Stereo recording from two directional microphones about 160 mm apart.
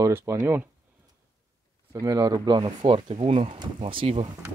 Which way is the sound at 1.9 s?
20° right (ahead or behind).